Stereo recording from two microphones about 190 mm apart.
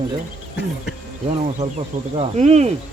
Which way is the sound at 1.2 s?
35° right (ahead or behind).